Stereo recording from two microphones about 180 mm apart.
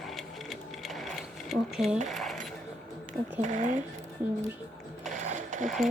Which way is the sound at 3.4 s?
45° right (ahead or behind).